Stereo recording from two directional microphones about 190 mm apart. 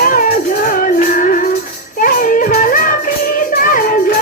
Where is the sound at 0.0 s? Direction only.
45° left (ahead or behind).